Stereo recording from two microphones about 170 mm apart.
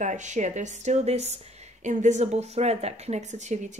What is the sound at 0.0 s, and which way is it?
Speech, 45° right (ahead or behind).